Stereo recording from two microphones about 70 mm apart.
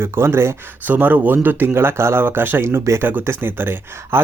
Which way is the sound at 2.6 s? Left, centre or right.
Right.